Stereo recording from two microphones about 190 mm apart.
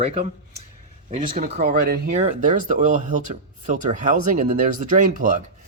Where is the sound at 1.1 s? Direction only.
35° right (ahead or behind).